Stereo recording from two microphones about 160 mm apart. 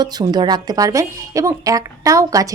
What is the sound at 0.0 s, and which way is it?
A woman's voice, 25° right (ahead or behind).